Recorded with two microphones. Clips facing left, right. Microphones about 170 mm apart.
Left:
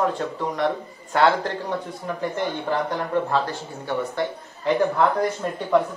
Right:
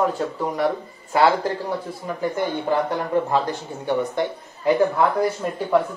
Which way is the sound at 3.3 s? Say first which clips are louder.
Right 2 dB; 15° right (ahead or behind).